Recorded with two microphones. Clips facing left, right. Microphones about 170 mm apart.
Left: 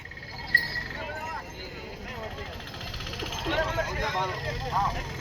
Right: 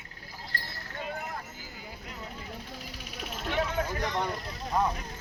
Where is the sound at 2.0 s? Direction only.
90° left.